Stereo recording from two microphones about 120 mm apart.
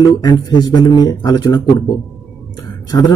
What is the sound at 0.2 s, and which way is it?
A man's voice, 35° left (ahead or behind).